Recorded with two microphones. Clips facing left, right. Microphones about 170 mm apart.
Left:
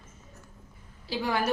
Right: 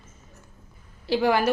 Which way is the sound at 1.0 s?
70° right (ahead or behind).